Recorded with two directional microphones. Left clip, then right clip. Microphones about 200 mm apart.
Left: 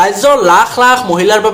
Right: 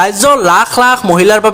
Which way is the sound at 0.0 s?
45° right (ahead or behind).